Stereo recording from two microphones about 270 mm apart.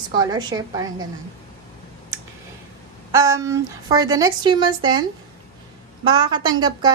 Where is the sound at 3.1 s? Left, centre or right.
Centre.